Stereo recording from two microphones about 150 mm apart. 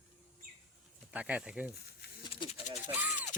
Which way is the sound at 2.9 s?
10° right (ahead or behind).